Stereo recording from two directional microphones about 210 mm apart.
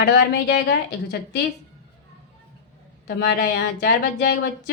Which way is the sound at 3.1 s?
45° left (ahead or behind).